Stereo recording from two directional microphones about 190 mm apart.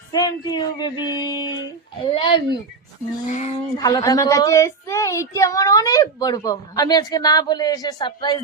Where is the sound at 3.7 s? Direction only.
20° left (ahead or behind).